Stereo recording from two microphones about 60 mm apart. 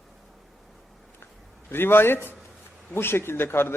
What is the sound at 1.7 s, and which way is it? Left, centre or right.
A man's voice, left.